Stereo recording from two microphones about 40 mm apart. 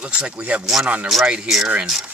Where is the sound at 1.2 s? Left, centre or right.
Right.